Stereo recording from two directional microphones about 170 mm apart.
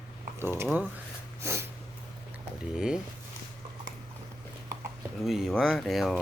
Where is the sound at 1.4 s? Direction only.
15° right (ahead or behind).